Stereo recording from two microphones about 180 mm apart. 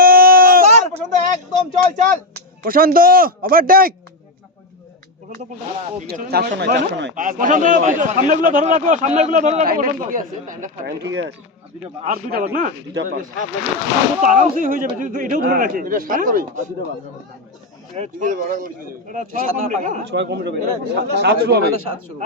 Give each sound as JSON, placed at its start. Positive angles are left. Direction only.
{"t": 0.0, "sound": "a sound", "side_deg": -55}
{"t": 2.3, "sound": "speech", "side_deg": -55}
{"t": 6.1, "sound": "a man's voice", "side_deg": -60}
{"t": 11.0, "sound": "speech", "side_deg": -85}
{"t": 12.0, "sound": "a man's voice", "side_deg": -50}
{"t": 17.9, "sound": "a man's voice", "side_deg": -40}
{"t": 20.1, "sound": "speech", "side_deg": -70}